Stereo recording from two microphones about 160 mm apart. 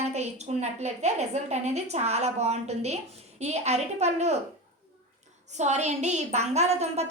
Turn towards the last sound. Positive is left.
turn(degrees=-40)  # may be behind; listen again after turning